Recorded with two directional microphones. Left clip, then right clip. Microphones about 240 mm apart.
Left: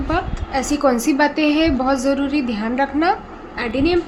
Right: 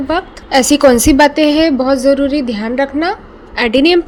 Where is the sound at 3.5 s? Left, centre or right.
Right.